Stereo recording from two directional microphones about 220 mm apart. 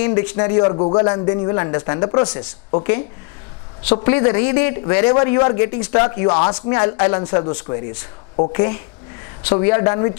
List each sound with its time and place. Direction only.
0.0 s a man's voice: 10° left (ahead or behind)
0.4 s a man's voice: 25° left (ahead or behind)